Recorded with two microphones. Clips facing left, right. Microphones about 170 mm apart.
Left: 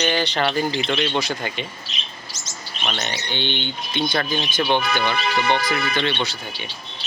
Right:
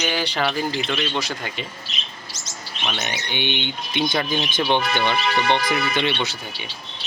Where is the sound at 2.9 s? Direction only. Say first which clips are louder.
Even; 10° right (ahead or behind).